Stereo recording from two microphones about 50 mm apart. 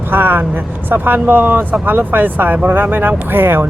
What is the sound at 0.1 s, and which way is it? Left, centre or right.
Speech, right.